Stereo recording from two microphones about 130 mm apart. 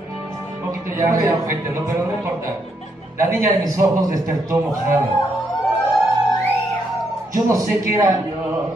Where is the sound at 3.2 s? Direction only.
25° right (ahead or behind).